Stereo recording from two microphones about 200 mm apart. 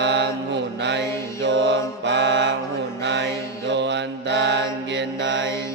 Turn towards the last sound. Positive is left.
turn(degrees=-60)  # may be behind; listen again after turning